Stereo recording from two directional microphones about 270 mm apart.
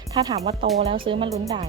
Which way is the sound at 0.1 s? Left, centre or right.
Centre.